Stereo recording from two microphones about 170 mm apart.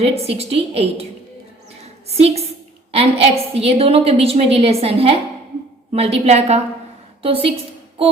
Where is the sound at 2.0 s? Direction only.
40° right (ahead or behind).